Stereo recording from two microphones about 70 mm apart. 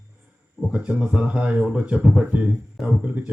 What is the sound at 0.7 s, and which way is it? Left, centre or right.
Speech, centre.